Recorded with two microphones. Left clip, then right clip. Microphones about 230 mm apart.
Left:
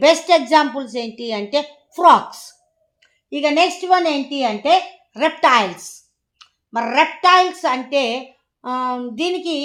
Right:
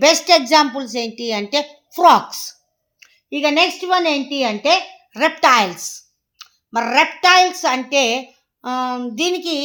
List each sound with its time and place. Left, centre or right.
0.0 s a woman's voice: right